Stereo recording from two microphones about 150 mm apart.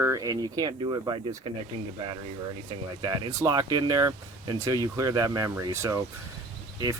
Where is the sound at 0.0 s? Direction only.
25° right (ahead or behind).